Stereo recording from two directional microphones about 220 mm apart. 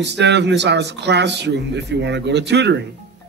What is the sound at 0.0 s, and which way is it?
Speech, 50° right (ahead or behind).